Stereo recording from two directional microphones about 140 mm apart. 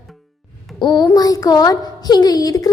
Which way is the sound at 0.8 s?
30° left (ahead or behind).